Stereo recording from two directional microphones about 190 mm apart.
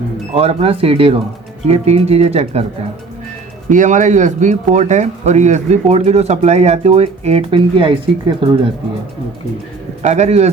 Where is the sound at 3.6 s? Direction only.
40° right (ahead or behind); by 8.7 s 25° right (ahead or behind).